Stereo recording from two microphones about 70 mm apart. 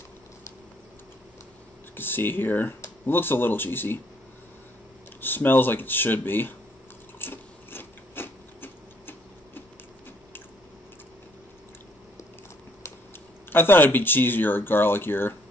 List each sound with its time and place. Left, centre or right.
2.0 s speech: left
5.2 s speech: left
7.2 s a sound: left
13.5 s speech: left